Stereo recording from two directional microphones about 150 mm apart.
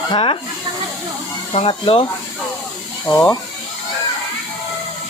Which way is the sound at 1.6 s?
35° left (ahead or behind).